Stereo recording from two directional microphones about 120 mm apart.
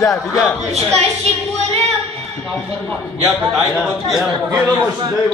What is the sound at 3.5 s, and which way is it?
A man's voice, 5° right (ahead or behind).